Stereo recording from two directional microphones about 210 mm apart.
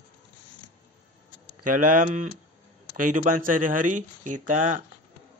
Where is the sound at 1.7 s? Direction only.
40° right (ahead or behind).